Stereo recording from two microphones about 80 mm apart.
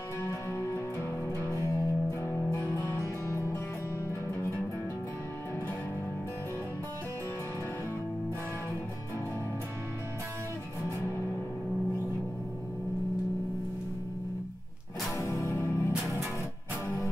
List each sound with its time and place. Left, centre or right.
0.2 s music: left
10.8 s music: left
15.1 s music: left